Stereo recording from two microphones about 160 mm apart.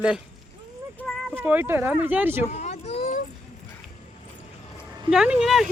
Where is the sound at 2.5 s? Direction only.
45° left (ahead or behind).